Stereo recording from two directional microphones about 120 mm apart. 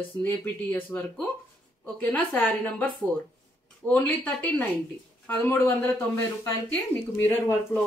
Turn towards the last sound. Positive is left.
turn(degrees=15)  # may be behind; listen again after turning